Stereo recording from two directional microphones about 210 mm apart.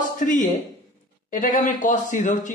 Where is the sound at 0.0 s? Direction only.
35° left (ahead or behind).